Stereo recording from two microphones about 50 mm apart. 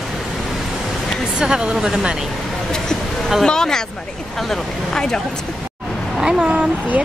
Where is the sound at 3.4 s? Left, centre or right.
Centre.